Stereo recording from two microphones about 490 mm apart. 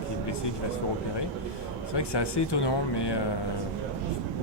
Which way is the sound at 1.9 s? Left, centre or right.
Left.